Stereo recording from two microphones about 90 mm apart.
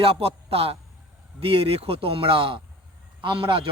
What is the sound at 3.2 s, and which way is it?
Speech, 65° right (ahead or behind).